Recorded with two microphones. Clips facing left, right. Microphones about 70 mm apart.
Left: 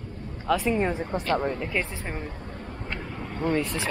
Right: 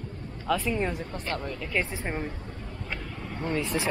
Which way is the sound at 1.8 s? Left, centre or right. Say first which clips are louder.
Right 2 dB; right.